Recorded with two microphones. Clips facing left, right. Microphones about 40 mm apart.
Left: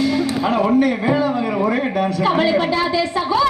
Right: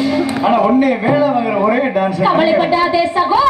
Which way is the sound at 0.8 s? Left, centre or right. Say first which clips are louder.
Right 4 dB; right.